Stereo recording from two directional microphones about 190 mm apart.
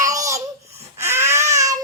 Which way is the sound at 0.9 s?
15° right (ahead or behind).